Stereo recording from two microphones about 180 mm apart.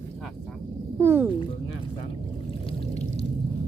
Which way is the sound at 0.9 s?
15° right (ahead or behind).